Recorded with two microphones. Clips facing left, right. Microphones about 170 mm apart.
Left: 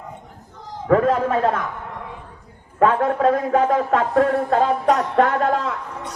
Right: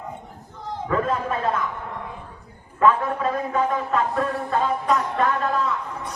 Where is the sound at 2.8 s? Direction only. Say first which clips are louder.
Left 3 dB; 75° left (ahead or behind).